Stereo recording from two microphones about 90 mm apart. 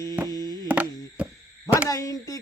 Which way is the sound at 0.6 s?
15° right (ahead or behind).